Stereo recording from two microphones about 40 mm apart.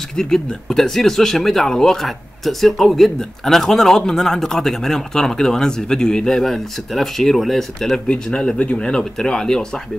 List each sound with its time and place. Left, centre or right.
0.1 s speech: centre
2.0 s speech: centre
6.4 s speech: centre